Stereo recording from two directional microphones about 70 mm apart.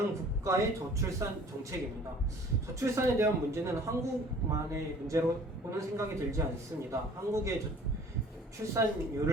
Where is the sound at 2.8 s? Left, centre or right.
Right.